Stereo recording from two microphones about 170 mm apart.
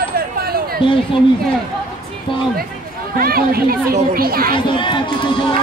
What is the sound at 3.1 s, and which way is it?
Speech, 60° right (ahead or behind).